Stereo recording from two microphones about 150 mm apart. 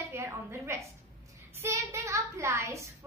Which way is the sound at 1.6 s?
20° right (ahead or behind).